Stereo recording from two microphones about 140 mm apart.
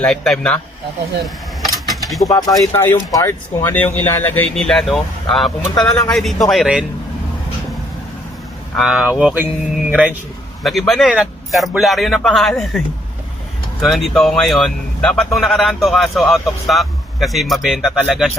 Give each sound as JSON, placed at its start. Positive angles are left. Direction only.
{"t": 0.0, "sound": "a man's voice", "side_deg": 5}
{"t": 1.2, "sound": "mechanisms", "side_deg": 0}
{"t": 2.0, "sound": "speech", "side_deg": 0}
{"t": 2.3, "sound": "a man's voice", "side_deg": 20}
{"t": 8.7, "sound": "a man's voice", "side_deg": 0}
{"t": 13.8, "sound": "a man's voice", "side_deg": 0}